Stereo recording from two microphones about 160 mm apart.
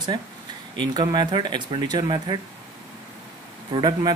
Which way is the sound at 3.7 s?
30° right (ahead or behind).